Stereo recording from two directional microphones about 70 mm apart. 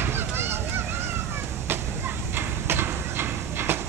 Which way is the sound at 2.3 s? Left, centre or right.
Right.